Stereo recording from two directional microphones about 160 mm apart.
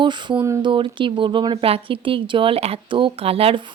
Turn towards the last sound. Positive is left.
turn(degrees=-35)  # may be behind; listen again after turning